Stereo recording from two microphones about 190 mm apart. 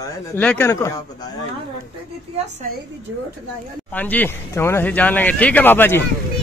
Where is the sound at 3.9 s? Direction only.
10° left (ahead or behind).